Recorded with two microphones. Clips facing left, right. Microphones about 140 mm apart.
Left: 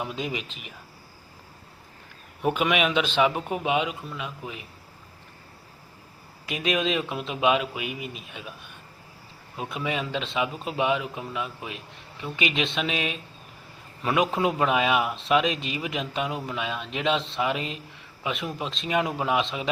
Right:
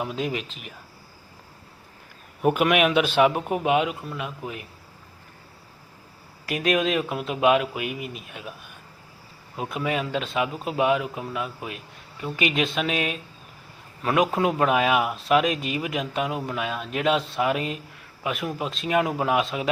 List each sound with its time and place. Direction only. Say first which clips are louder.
0.0 s speech: right 3 dB; centre (ahead or behind)
2.4 s speech: right 4 dB; 5° right (ahead or behind)
6.5 s speech: right 4 dB; 50° right (ahead or behind)
6.7 s speech: right 2 dB; 5° right (ahead or behind)
7.8 s speech: right 3 dB; 50° right (ahead or behind)
8.3 s speech: right 2 dB; 5° right (ahead or behind)
9.6 s speech: right 3 dB; centre (ahead or behind)
12.9 s speech: right 3 dB; 50° right (ahead or behind)
14.0 s speech: right 2 dB; centre (ahead or behind)